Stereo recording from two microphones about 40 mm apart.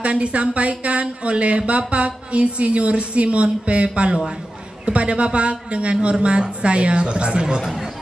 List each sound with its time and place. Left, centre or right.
0.0 s a woman's voice: right
7.6 s speech: centre